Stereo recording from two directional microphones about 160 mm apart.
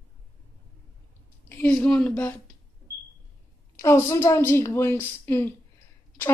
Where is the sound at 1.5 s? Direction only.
10° left (ahead or behind).